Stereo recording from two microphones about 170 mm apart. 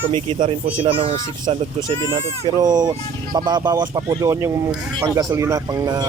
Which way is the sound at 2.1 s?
25° right (ahead or behind).